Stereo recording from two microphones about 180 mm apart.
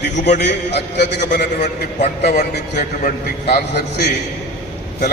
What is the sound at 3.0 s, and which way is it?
A man's voice, 60° left (ahead or behind).